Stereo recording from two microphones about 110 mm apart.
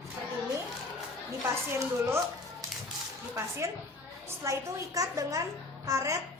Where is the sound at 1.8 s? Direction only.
25° right (ahead or behind).